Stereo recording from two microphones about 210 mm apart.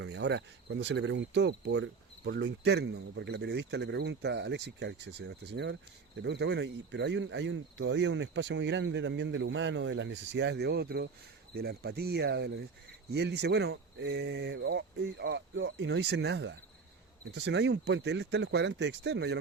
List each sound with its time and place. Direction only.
0.0 s speech: 55° right (ahead or behind)